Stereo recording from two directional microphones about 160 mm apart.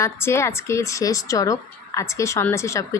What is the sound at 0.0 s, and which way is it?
Speech, 15° left (ahead or behind).